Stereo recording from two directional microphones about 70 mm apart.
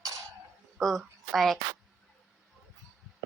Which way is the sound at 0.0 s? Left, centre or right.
Right.